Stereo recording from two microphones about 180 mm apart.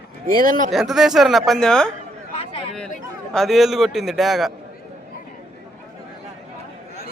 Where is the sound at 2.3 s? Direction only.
35° left (ahead or behind).